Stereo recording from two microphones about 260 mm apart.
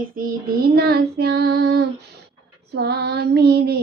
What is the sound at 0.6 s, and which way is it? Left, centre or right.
Child singing, right.